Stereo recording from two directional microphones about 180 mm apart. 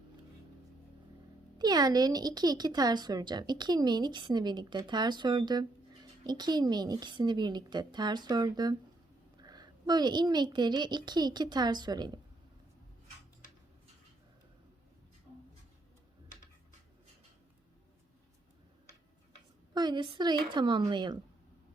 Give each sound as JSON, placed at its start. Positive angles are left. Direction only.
{"t": 1.5, "sound": "speech", "side_deg": -25}
{"t": 19.7, "sound": "speech", "side_deg": -25}